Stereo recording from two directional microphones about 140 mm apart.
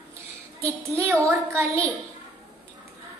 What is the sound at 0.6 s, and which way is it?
Speech, 20° right (ahead or behind).